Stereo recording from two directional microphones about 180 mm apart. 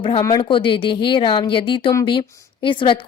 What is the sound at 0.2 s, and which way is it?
Speech, 20° left (ahead or behind).